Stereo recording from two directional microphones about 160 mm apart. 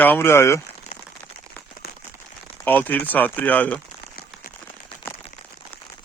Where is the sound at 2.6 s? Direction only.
10° left (ahead or behind).